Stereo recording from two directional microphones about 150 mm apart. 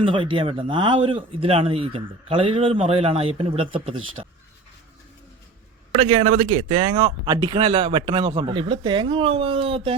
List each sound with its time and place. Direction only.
0.0 s speech: 35° right (ahead or behind)
6.0 s speech: 40° right (ahead or behind)